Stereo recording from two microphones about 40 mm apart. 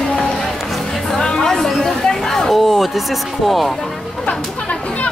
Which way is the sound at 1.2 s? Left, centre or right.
Centre.